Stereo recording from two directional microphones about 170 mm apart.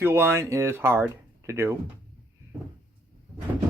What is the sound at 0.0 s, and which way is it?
Speech, 15° right (ahead or behind).